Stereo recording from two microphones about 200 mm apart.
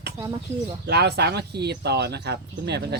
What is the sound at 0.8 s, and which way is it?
Speech, 55° right (ahead or behind).